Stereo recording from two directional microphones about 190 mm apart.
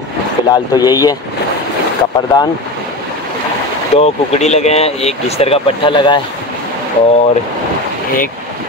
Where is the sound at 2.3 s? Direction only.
20° left (ahead or behind).